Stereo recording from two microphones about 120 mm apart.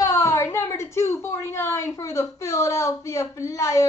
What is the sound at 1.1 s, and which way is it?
A woman's voice, 25° left (ahead or behind).